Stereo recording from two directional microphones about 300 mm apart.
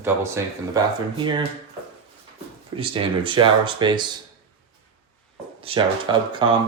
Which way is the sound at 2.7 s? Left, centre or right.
Centre.